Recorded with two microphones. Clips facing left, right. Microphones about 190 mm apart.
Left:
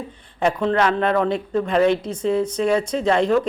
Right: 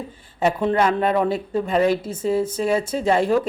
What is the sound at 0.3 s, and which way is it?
Speech, 10° right (ahead or behind).